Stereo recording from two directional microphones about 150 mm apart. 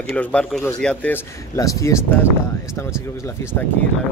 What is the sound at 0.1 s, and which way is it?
Speech, 10° left (ahead or behind).